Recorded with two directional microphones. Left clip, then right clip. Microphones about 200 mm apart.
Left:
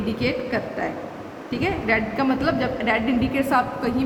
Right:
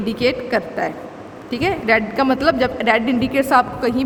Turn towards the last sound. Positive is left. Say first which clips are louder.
# right 6 dB
turn(degrees=-50)  # may be behind; listen again after turning